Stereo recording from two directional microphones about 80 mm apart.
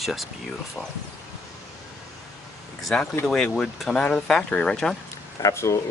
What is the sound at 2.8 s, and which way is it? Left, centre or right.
Speech, centre.